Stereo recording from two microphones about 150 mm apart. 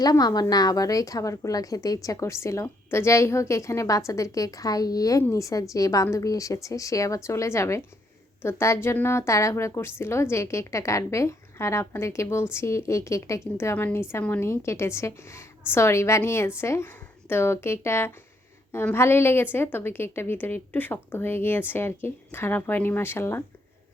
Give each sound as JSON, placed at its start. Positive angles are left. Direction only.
{"t": 0.0, "sound": "a woman's voice", "side_deg": 25}